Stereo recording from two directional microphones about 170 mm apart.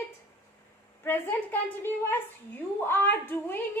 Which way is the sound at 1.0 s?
10° left (ahead or behind).